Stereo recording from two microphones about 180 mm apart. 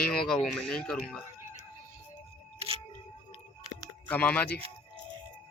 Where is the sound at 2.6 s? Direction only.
30° right (ahead or behind).